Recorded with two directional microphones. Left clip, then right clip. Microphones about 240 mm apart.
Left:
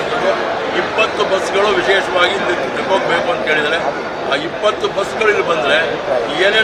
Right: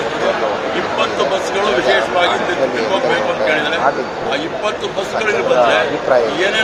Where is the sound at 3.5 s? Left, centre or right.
Centre.